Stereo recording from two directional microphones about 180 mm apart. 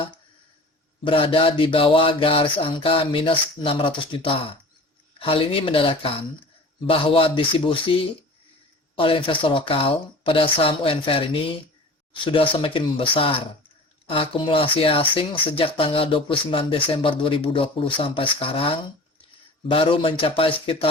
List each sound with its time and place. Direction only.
1.0 s speech: 30° left (ahead or behind)